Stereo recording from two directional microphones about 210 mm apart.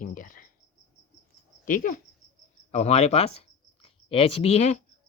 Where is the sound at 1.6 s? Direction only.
40° left (ahead or behind).